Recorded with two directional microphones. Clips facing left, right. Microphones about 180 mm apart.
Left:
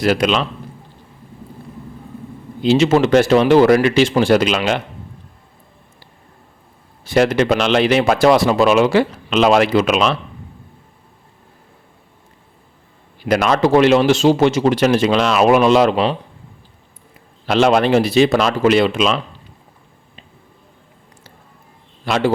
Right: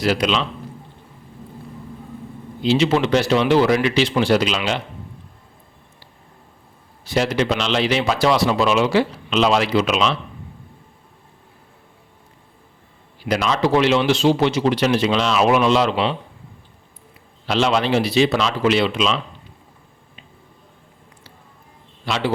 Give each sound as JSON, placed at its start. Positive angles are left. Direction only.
{"t": 0.0, "sound": "speech", "side_deg": 50}
{"t": 2.6, "sound": "speech", "side_deg": 45}
{"t": 7.0, "sound": "speech", "side_deg": 50}
{"t": 13.2, "sound": "speech", "side_deg": 55}
{"t": 17.4, "sound": "speech", "side_deg": 50}
{"t": 22.0, "sound": "a man's voice", "side_deg": 50}